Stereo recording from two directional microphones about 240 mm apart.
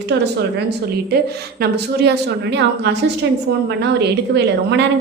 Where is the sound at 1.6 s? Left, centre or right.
Right.